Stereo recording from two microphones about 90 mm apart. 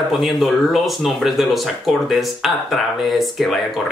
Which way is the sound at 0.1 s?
Centre (ahead or behind).